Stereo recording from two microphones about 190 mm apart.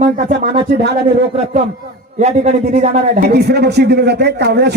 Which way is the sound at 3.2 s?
60° right (ahead or behind).